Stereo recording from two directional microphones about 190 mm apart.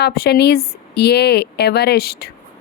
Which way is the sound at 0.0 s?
55° left (ahead or behind).